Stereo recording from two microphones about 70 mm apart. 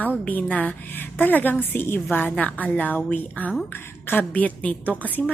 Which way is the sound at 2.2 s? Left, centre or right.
Left.